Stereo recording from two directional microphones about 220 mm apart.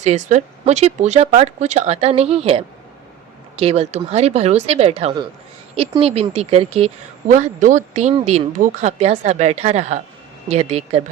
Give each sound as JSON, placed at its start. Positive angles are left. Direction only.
{"t": 0.0, "sound": "a woman's voice", "side_deg": -30}